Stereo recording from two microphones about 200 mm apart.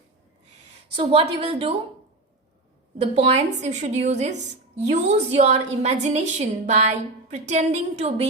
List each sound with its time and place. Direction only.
0.9 s a woman's voice: 30° right (ahead or behind)
3.0 s a woman's voice: 30° right (ahead or behind)